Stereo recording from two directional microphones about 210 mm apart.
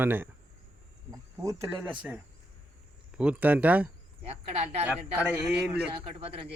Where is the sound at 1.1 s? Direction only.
15° right (ahead or behind).